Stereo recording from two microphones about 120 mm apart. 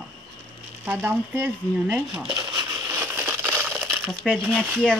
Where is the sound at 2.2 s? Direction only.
40° right (ahead or behind).